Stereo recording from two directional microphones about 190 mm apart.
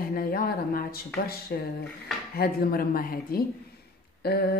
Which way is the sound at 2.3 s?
55° left (ahead or behind).